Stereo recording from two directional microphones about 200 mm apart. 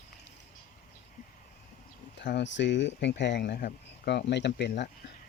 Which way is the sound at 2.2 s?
60° left (ahead or behind).